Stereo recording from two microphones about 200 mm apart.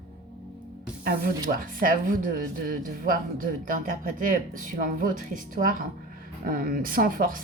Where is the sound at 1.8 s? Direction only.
45° right (ahead or behind).